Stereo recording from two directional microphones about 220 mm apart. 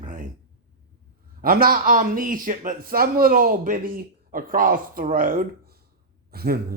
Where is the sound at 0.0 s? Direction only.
35° right (ahead or behind).